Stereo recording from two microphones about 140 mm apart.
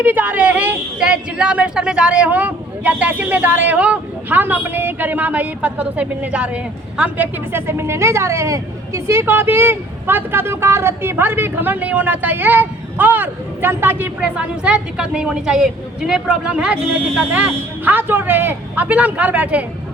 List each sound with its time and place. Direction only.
0.0 s speech: 10° right (ahead or behind)